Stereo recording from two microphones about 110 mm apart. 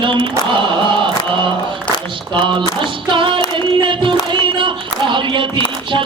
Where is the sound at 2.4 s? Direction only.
50° right (ahead or behind).